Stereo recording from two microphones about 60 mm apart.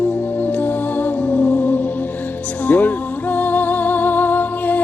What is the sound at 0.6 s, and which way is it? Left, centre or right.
Music, left.